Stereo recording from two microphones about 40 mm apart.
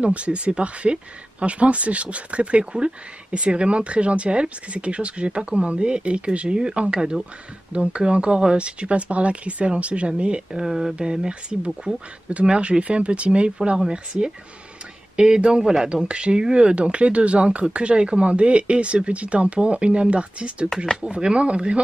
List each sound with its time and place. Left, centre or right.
0.0 s speech: right
10.6 s speech: centre
11.0 s speech: right